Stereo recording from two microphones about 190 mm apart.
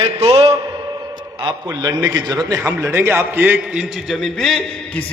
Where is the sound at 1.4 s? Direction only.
20° right (ahead or behind).